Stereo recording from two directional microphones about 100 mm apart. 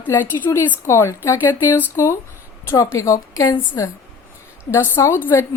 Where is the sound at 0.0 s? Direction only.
20° left (ahead or behind).